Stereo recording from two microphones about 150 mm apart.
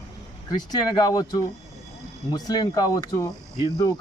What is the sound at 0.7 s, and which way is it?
Speech, 25° left (ahead or behind).